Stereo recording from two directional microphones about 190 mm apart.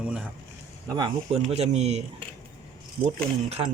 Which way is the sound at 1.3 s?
35° right (ahead or behind).